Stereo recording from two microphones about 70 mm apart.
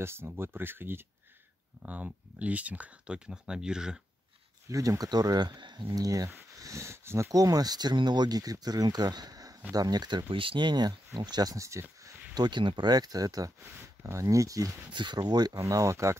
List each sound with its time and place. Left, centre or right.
0.0 s speech: right
1.8 s speech: right
4.6 s speech: right
6.6 s speech: right
7.3 s speech: right
11.5 s speech: right
12.4 s speech: right
13.6 s speech: right
15.0 s speech: right
15.5 s speech: right